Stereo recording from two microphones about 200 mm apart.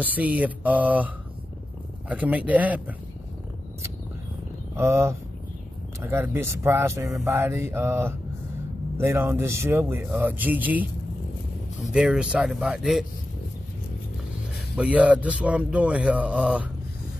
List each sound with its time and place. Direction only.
0.0 s speech: 10° right (ahead or behind)
4.7 s speech: 15° right (ahead or behind)
14.8 s speech: 5° right (ahead or behind)